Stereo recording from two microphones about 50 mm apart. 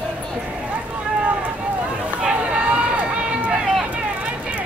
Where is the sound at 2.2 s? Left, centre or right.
Right.